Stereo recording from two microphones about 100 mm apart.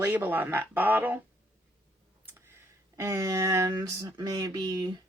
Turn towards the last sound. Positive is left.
turn(degrees=-40)  # may be behind; listen again after turning